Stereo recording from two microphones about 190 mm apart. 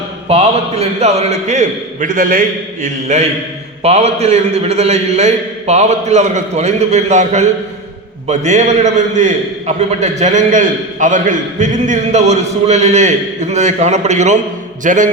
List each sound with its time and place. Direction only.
0.3 s a man's voice: 35° right (ahead or behind)